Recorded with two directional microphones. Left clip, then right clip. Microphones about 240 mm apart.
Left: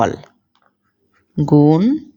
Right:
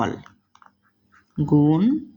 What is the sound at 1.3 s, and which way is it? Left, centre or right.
Speech, left.